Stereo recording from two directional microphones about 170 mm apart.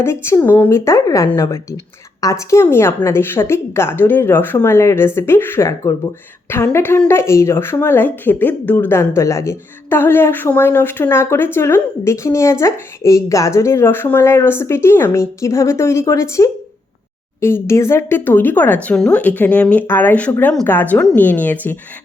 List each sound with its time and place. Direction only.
0.0 s a woman's voice: 15° left (ahead or behind)